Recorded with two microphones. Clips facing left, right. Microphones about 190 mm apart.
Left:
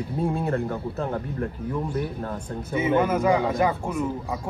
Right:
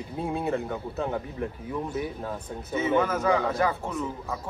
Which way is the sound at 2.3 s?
10° left (ahead or behind).